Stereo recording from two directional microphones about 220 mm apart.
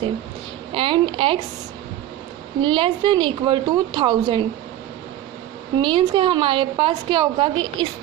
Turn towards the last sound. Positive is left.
turn(degrees=-20)  # may be behind; listen again after turning